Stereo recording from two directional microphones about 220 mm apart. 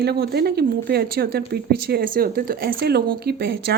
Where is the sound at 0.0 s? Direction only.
45° right (ahead or behind).